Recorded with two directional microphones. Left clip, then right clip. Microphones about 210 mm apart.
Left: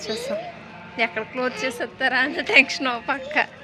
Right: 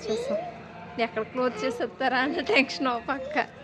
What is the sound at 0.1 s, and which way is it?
Speech, 55° right (ahead or behind).